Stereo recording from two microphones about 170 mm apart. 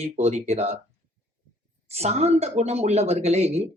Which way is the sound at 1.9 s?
40° right (ahead or behind).